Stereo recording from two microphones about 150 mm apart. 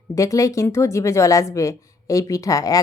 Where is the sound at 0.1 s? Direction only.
20° left (ahead or behind).